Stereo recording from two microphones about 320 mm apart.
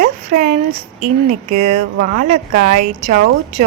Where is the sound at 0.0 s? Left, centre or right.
Right.